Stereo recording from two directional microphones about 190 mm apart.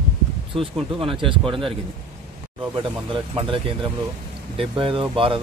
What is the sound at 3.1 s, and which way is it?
Speech, 30° right (ahead or behind).